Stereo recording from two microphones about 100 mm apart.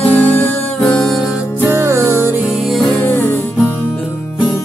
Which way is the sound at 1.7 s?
25° right (ahead or behind).